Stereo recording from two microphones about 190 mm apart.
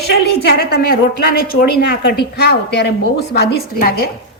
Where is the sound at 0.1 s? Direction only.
55° left (ahead or behind).